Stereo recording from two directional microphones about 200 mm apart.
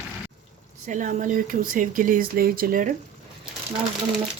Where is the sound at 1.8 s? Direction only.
45° right (ahead or behind).